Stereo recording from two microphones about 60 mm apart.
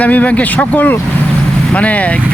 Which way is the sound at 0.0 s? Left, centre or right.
Left.